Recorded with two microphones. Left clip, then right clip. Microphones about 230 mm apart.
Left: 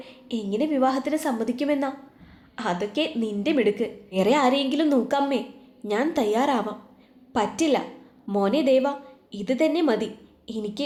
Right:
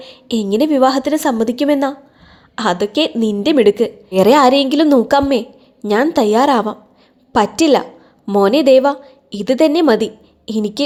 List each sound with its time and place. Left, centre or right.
0.0 s a woman's voice: right